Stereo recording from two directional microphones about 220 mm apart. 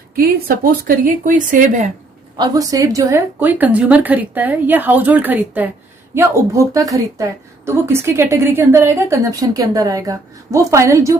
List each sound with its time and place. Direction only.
0.2 s speech: 45° right (ahead or behind)
2.4 s a woman's voice: 15° right (ahead or behind)